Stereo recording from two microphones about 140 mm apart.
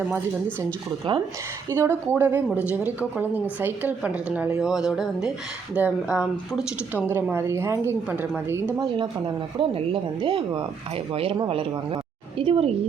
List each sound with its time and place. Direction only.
1.7 s a woman's voice: 15° right (ahead or behind)
9.0 s speech: 35° right (ahead or behind)